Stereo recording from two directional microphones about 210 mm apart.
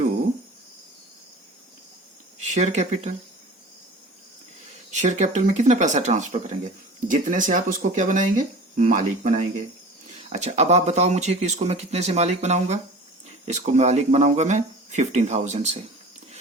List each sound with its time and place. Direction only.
2.4 s speech: 35° right (ahead or behind)
4.9 s speech: 35° right (ahead or behind)